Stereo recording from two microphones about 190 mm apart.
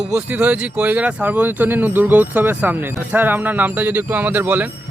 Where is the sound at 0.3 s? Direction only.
5° right (ahead or behind).